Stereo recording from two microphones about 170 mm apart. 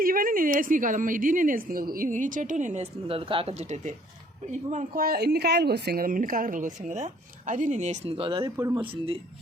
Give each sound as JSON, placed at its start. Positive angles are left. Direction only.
{"t": 0.0, "sound": "a woman's voice", "side_deg": -55}
{"t": 4.7, "sound": "a woman's voice", "side_deg": -55}
{"t": 8.4, "sound": "speech", "side_deg": -20}
{"t": 8.8, "sound": "speech", "side_deg": -30}